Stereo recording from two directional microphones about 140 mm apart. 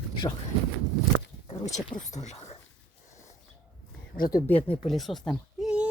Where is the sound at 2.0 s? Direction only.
55° left (ahead or behind).